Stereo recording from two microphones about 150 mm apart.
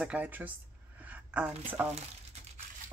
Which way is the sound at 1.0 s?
10° right (ahead or behind).